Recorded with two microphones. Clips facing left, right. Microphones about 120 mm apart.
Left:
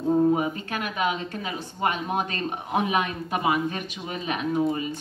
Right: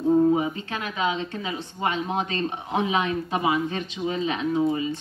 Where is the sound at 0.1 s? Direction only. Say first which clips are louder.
Right 2 dB; 10° left (ahead or behind).